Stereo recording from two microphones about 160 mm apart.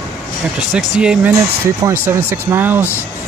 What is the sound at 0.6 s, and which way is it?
Speech, 5° right (ahead or behind).